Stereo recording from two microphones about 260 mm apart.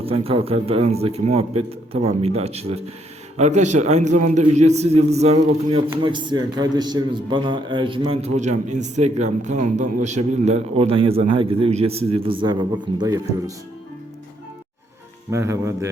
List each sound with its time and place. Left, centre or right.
0.0 s a man's voice: right
15.3 s a man's voice: centre